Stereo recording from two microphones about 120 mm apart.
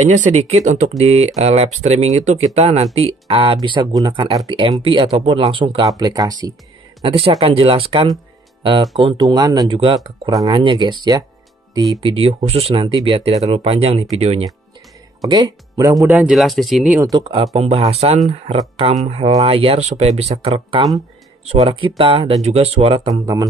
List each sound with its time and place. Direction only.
0.0 s speech: 80° right; by 3.1 s 60° right (ahead or behind)
3.3 s speech: 50° right (ahead or behind)
5.9 s speech: 30° right (ahead or behind)
7.1 s speech: 50° right (ahead or behind)
9.2 s speech: 30° right (ahead or behind)
9.8 s speech: 45° right (ahead or behind); by 12.0 s 30° right (ahead or behind)
12.0 s speech: 50° right (ahead or behind)
15.2 s speech: 40° right (ahead or behind)
16.1 s speech: 5° right (ahead or behind)
17.2 s speech: 40° right (ahead or behind)
17.6 s speech: 55° right (ahead or behind)